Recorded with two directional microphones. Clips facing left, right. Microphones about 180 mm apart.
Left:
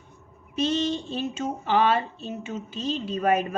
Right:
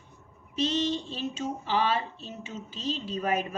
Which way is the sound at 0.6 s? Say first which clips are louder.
Left 3 dB; 55° left (ahead or behind).